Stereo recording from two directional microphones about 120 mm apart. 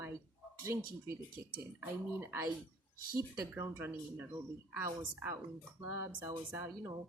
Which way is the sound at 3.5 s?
20° right (ahead or behind).